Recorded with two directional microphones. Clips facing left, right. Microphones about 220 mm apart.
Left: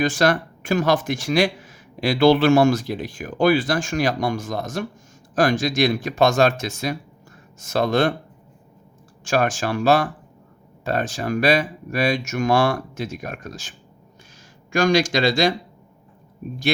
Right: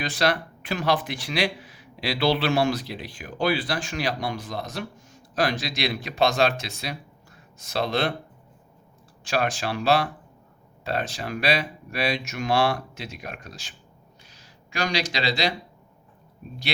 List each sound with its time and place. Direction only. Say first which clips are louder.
0.0 s speech: left 6 dB; 45° left (ahead or behind)
9.2 s speech: left 5 dB; 45° left (ahead or behind)